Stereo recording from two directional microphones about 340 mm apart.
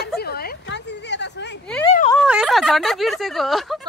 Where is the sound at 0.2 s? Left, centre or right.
Left.